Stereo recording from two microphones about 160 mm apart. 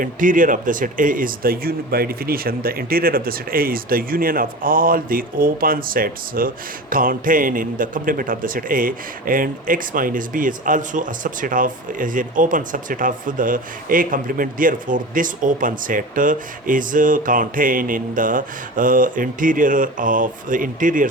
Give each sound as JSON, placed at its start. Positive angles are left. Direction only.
{"t": 0.0, "sound": "a man's voice", "side_deg": -55}